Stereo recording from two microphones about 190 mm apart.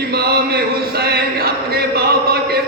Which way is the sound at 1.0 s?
55° right (ahead or behind).